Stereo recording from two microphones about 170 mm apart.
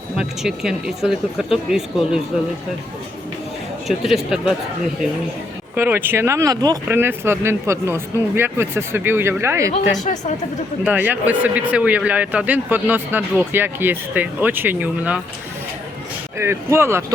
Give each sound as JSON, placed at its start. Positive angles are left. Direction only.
{"t": 0.2, "sound": "speech", "side_deg": -5}
{"t": 3.8, "sound": "speech", "side_deg": 0}
{"t": 5.7, "sound": "a man's voice", "side_deg": -10}
{"t": 6.8, "sound": "a man's voice", "side_deg": -10}
{"t": 9.9, "sound": "speech", "side_deg": 45}
{"t": 10.8, "sound": "a man's voice", "side_deg": -10}
{"t": 16.4, "sound": "a man's voice", "side_deg": -15}